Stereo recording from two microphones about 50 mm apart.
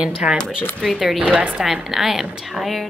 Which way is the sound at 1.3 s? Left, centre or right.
Right.